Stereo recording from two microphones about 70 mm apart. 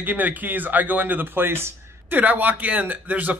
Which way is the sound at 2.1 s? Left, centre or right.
Right.